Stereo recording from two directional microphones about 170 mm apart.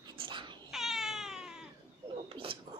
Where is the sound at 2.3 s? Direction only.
30° right (ahead or behind).